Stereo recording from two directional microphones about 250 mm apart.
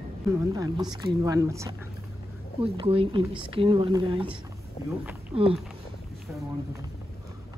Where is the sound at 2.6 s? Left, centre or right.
Right.